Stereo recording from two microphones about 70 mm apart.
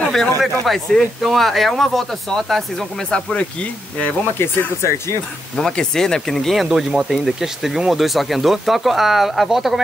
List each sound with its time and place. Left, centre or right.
0.1 s speech: centre
4.4 s speech: left
5.6 s speech: centre